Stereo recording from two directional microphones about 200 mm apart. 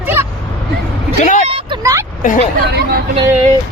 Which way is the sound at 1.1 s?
40° left (ahead or behind).